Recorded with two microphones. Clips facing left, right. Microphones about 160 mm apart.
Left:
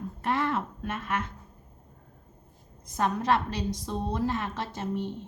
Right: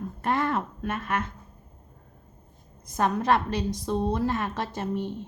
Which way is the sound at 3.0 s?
55° right (ahead or behind).